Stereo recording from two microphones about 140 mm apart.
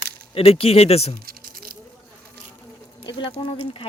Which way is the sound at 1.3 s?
90° right.